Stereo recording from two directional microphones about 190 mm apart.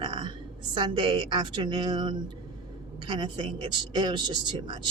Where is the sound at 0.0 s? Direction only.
25° right (ahead or behind).